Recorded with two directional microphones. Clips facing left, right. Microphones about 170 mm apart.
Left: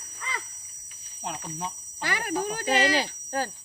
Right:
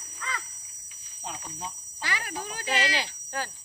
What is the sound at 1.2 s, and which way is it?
Speech, 60° left (ahead or behind).